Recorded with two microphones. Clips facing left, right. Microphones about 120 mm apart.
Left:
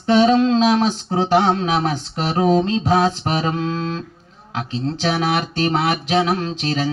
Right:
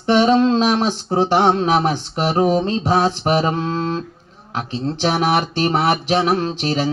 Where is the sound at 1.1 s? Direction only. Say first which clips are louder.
Right 2 dB; 35° right (ahead or behind).